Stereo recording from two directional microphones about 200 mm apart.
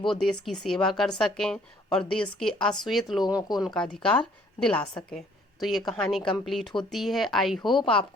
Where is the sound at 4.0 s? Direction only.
5° left (ahead or behind).